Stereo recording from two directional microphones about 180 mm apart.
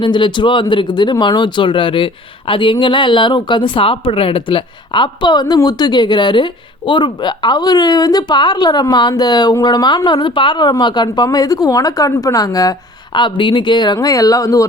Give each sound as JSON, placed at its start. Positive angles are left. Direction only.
{"t": 0.0, "sound": "speech", "side_deg": 25}